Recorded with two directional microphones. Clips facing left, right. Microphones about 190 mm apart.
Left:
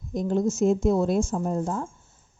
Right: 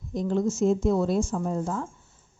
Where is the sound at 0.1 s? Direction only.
45° left (ahead or behind).